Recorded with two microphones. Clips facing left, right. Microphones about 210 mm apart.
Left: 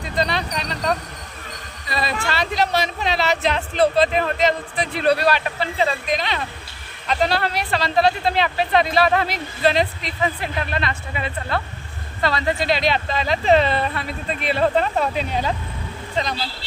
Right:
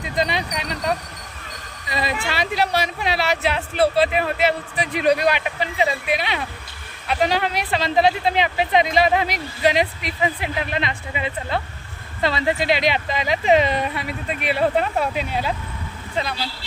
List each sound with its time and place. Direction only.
0.1 s speech: 15° right (ahead or behind)